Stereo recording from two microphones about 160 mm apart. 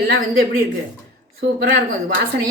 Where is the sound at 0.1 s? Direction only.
75° right (ahead or behind).